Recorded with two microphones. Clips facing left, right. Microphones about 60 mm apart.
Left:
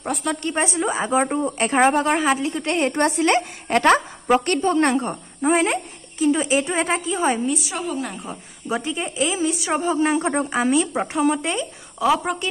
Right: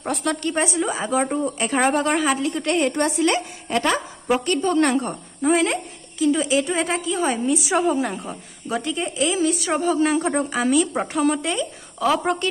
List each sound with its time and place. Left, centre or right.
0.0 s a woman's voice: centre
0.4 s a woman's voice: left
4.6 s a woman's voice: left
7.8 s a woman's voice: centre
8.6 s a woman's voice: left
10.9 s speech: centre